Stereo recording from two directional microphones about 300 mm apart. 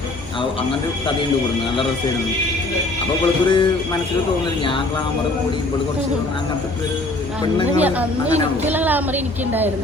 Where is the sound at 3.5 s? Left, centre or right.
Centre.